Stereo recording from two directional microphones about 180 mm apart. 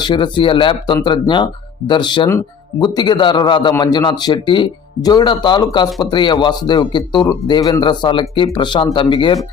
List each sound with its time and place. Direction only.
0.0 s a man's voice: 25° left (ahead or behind)